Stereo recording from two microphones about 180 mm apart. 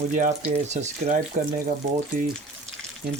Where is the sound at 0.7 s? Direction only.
40° right (ahead or behind).